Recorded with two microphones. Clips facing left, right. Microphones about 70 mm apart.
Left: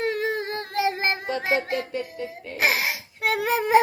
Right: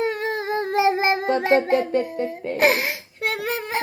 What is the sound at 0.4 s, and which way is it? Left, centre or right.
Singing, centre.